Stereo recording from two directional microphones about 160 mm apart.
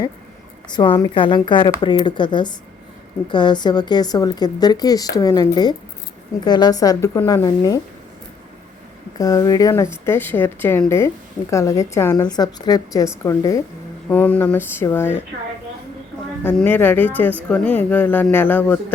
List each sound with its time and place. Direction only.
0.7 s speech: 25° left (ahead or behind)
9.1 s speech: 20° left (ahead or behind)
16.4 s speech: 10° left (ahead or behind)